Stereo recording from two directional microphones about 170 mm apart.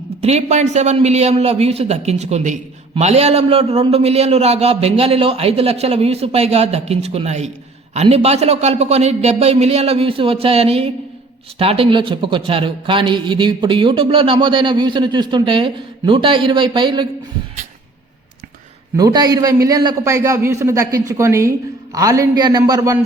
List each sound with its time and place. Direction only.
0.2 s a man's voice: 40° right (ahead or behind)
18.9 s a man's voice: 20° right (ahead or behind)